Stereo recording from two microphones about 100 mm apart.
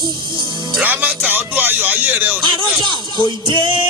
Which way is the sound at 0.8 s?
15° right (ahead or behind).